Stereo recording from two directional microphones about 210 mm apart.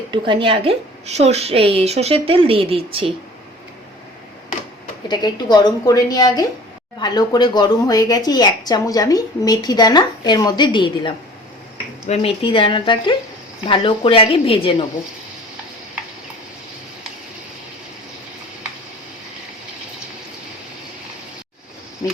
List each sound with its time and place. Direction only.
0.1 s a woman's voice: 25° right (ahead or behind)
5.0 s a woman's voice: 20° left (ahead or behind)